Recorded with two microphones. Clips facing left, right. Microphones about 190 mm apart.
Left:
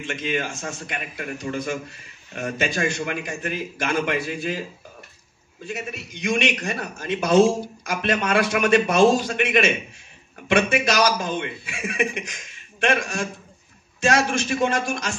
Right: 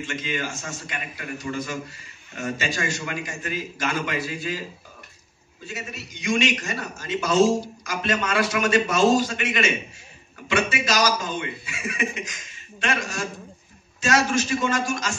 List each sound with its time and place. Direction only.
0.0 s a man's voice: 55° left (ahead or behind)
5.7 s a man's voice: 55° left (ahead or behind)